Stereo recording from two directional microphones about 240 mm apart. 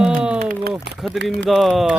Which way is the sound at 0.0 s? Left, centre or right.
Centre.